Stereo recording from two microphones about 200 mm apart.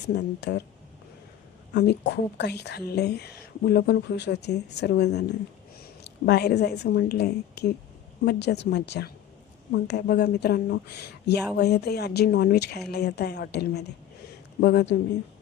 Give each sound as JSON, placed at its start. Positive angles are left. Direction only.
{"t": 0.1, "sound": "speech", "side_deg": 60}
{"t": 1.7, "sound": "a woman's voice", "side_deg": 55}